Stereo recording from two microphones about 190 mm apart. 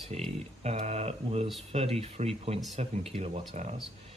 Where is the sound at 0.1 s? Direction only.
35° right (ahead or behind).